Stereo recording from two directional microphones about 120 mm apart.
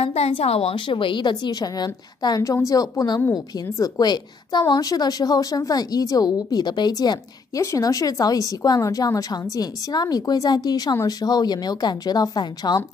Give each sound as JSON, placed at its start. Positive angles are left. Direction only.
{"t": 0.0, "sound": "a woman's voice", "side_deg": 60}